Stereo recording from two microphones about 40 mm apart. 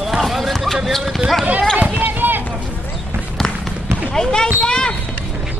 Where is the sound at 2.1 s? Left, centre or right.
Right.